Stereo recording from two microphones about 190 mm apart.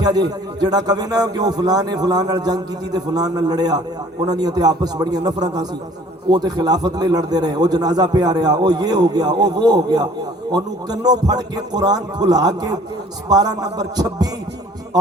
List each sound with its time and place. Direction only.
0.3 s a man's voice: 20° right (ahead or behind)